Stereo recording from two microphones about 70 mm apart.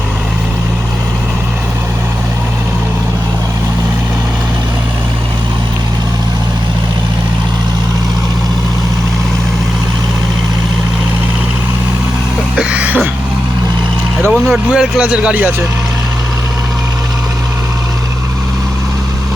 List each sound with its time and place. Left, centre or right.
12.5 s a sound: centre
14.3 s vehicle: centre
14.7 s speech: centre